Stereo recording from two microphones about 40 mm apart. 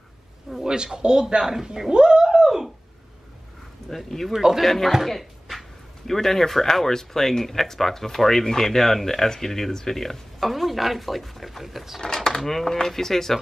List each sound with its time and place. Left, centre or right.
0.7 s speech: centre
3.9 s speech: centre
4.3 s speech: centre
4.6 s speech: centre
12.0 s speech: centre